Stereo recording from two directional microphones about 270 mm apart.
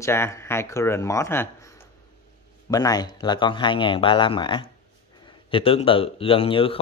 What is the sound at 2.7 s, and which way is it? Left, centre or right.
A man's voice, centre.